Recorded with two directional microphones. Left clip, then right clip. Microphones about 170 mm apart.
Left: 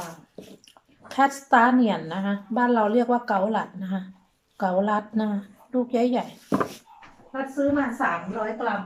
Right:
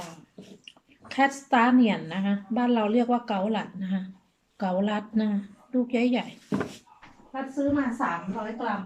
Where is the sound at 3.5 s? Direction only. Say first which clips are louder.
Left 4 dB; 40° left (ahead or behind).